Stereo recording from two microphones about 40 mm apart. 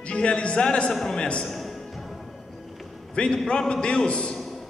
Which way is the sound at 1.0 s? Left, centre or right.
Centre.